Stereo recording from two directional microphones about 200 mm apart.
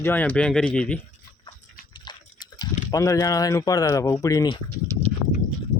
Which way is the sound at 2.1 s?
20° left (ahead or behind).